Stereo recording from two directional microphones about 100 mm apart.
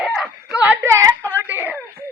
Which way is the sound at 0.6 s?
15° right (ahead or behind).